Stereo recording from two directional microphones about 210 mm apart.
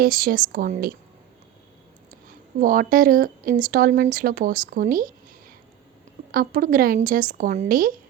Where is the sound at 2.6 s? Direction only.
40° right (ahead or behind).